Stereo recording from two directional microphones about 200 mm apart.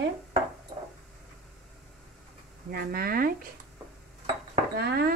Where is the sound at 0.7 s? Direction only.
35° right (ahead or behind).